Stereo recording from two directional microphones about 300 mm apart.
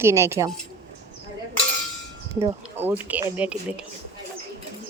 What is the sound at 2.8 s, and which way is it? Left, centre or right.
Speech, centre.